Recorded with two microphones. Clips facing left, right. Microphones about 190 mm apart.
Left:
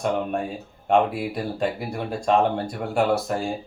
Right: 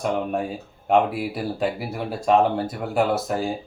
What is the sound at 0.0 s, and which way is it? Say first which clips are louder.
Speech: even; 5° right (ahead or behind).